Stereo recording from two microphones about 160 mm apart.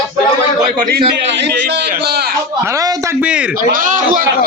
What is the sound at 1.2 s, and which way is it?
A man's voice, 90° right.